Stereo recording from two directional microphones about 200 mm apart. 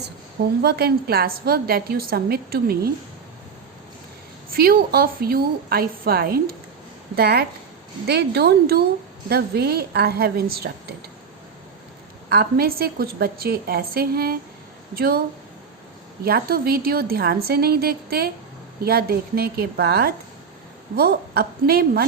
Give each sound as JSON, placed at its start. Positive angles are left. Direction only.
{"t": 0.6, "sound": "a woman's voice", "side_deg": -55}
{"t": 4.5, "sound": "a woman's voice", "side_deg": -50}
{"t": 12.3, "sound": "a woman's voice", "side_deg": -50}
{"t": 16.2, "sound": "a woman's voice", "side_deg": -50}